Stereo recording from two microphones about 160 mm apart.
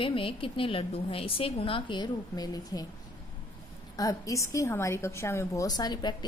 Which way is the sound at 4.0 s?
20° left (ahead or behind).